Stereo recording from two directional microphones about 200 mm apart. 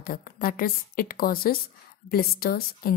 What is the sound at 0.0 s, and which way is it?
Speech, 45° left (ahead or behind).